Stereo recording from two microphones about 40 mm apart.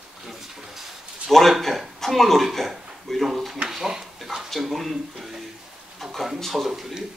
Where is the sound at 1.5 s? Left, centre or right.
Centre.